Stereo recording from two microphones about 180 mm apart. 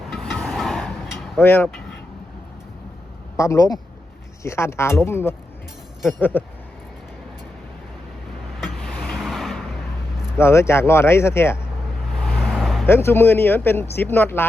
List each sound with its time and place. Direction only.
0.1 s vehicle: centre (ahead or behind)
1.4 s speech: 10° left (ahead or behind)
3.3 s speech: 15° left (ahead or behind)
8.6 s vehicle: centre (ahead or behind)
10.3 s speech: 15° left (ahead or behind)
12.2 s vehicle: centre (ahead or behind)
12.9 s speech: 15° left (ahead or behind)